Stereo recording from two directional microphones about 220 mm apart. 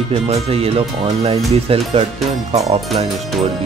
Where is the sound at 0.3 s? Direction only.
25° right (ahead or behind).